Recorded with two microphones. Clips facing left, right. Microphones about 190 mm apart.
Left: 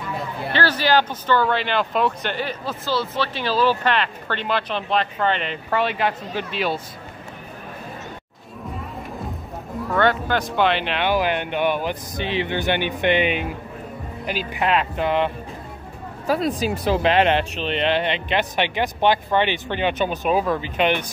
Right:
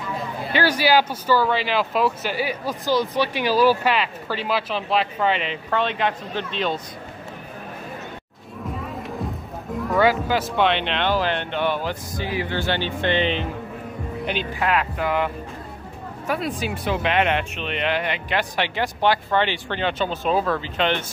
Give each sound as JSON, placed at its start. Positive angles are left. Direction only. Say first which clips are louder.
{"t": 0.5, "sound": "speech", "louder": "right 1 dB", "side_deg": -10}
{"t": 9.9, "sound": "speech", "louder": "right 1 dB", "side_deg": -5}
{"t": 14.5, "sound": "speech", "louder": "left 3 dB", "side_deg": 20}
{"t": 16.3, "sound": "speech", "louder": "left 4 dB", "side_deg": 40}